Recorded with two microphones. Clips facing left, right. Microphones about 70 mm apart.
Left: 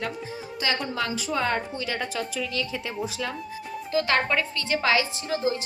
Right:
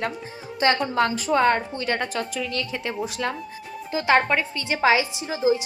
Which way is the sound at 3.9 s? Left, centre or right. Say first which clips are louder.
Right 4 dB; right.